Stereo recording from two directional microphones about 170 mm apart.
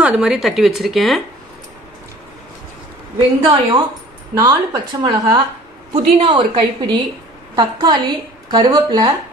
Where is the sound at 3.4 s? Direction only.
30° right (ahead or behind).